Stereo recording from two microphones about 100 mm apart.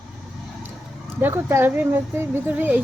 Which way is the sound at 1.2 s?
25° right (ahead or behind).